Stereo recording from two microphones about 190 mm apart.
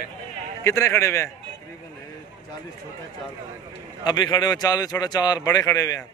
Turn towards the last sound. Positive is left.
turn(degrees=20)  # may be behind; listen again after turning